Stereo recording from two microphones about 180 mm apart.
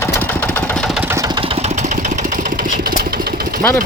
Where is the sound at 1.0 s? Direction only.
20° right (ahead or behind); by 3.6 s 55° right (ahead or behind).